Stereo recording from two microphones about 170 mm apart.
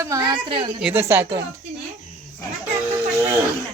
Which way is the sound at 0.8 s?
5° right (ahead or behind).